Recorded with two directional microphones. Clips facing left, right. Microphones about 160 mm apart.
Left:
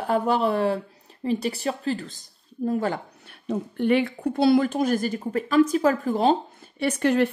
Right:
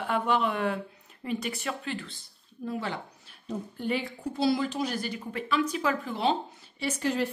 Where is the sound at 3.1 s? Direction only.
65° left (ahead or behind).